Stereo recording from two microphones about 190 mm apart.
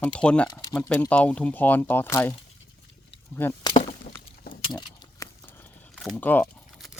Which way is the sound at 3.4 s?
10° left (ahead or behind).